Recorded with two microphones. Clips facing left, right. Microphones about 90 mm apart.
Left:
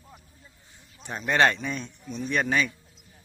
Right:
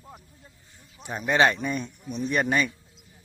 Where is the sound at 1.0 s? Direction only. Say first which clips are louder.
Right 1 dB; 10° right (ahead or behind).